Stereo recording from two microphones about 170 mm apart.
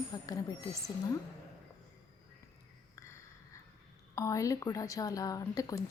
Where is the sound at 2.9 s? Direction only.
15° left (ahead or behind).